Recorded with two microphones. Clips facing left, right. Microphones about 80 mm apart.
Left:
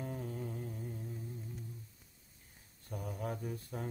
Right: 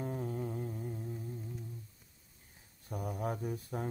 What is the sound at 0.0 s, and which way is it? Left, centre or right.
Music, right.